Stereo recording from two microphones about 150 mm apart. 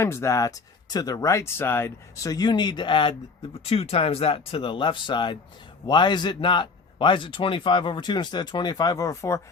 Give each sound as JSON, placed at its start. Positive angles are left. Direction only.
{"t": 0.0, "sound": "speech", "side_deg": 20}